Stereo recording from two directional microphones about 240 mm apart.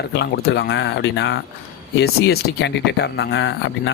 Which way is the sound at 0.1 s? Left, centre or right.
Left.